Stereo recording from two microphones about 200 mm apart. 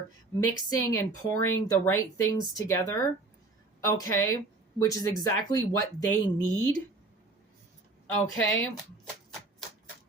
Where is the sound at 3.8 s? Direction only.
15° left (ahead or behind).